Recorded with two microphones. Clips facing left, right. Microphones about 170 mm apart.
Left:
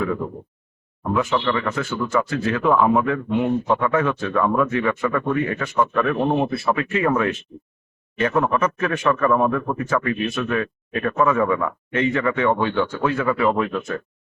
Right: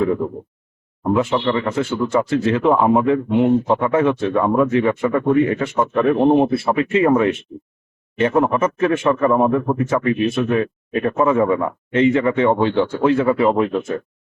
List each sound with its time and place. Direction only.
1.0 s speech: 25° right (ahead or behind)